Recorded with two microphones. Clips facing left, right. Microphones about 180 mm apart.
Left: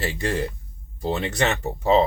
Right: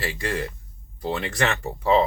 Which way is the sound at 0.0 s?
25° left (ahead or behind).